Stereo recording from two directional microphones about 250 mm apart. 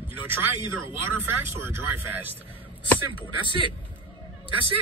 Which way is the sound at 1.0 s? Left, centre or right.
Centre.